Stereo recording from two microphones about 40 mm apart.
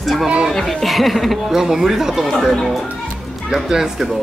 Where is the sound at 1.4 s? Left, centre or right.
Centre.